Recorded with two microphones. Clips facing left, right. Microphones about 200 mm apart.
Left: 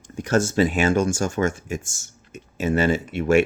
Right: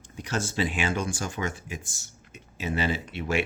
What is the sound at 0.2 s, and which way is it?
Speech, 45° left (ahead or behind).